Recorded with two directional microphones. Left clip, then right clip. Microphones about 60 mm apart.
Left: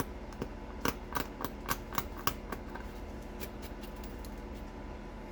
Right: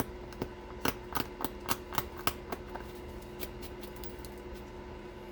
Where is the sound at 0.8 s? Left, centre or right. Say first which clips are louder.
Right 1 dB; right.